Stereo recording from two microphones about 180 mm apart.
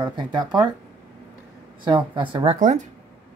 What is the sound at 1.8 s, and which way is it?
Speech, 25° right (ahead or behind).